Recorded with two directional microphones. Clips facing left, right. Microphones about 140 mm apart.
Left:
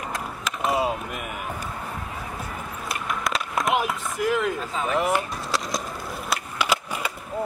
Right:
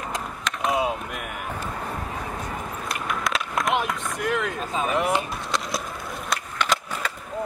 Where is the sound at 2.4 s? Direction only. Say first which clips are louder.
Right 2 dB; centre (ahead or behind).